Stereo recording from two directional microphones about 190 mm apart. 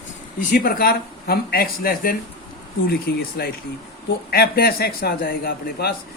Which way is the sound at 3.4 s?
55° left (ahead or behind).